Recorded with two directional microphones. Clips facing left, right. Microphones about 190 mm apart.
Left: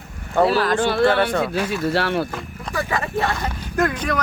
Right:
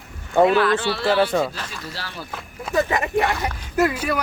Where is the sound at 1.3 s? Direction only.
5° right (ahead or behind).